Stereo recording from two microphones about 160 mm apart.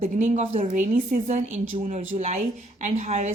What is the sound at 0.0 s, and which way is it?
A woman's voice, 45° right (ahead or behind).